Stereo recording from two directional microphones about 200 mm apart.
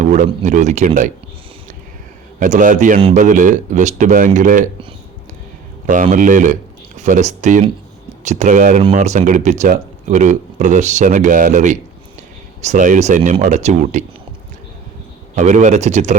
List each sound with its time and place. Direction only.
0.0 s speech: 35° right (ahead or behind)
2.4 s speech: 40° right (ahead or behind)
5.8 s speech: 40° right (ahead or behind)
15.4 s speech: 35° right (ahead or behind)